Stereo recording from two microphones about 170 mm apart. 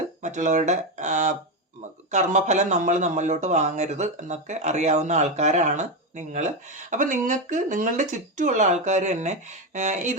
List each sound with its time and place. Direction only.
0.2 s speech: 45° right (ahead or behind)